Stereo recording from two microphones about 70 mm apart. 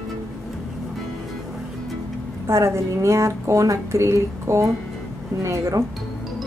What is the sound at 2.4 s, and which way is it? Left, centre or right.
A woman's voice, right.